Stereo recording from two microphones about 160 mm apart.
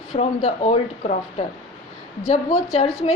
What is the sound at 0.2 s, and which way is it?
A woman's voice, 45° left (ahead or behind).